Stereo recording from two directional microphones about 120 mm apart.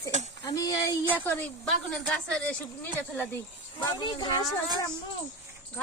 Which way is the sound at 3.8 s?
35° left (ahead or behind).